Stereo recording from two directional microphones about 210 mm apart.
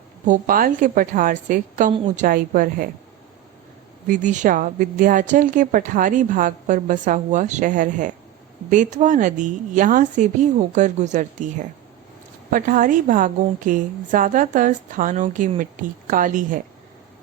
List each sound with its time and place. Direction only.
0.3 s a woman's voice: 40° right (ahead or behind)
4.0 s a woman's voice: 35° right (ahead or behind)